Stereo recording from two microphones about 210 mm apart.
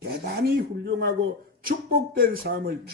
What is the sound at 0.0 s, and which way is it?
Speech, 50° right (ahead or behind).